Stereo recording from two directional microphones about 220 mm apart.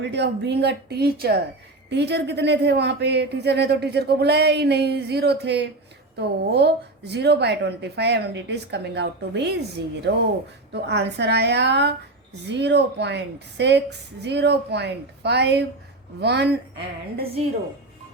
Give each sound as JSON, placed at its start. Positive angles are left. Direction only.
{"t": 0.0, "sound": "speech", "side_deg": -50}